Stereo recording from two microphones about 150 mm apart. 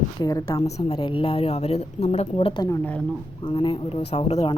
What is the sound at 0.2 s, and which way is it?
Speech, 25° left (ahead or behind).